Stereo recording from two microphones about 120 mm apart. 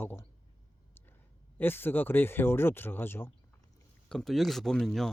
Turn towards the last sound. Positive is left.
turn(degrees=0)  # may be behind; listen again after turning